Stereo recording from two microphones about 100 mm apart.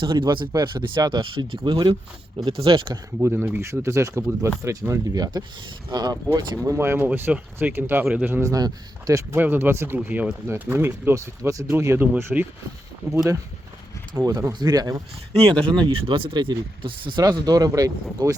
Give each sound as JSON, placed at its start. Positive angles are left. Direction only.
{"t": 0.0, "sound": "speech", "side_deg": -55}
{"t": 3.2, "sound": "speech", "side_deg": -20}
{"t": 3.7, "sound": "speech", "side_deg": -30}
{"t": 6.7, "sound": "speech", "side_deg": -25}
{"t": 8.5, "sound": "speech", "side_deg": -35}
{"t": 9.3, "sound": "speech", "side_deg": -20}
{"t": 13.0, "sound": "speech", "side_deg": -35}
{"t": 15.9, "sound": "speech", "side_deg": -60}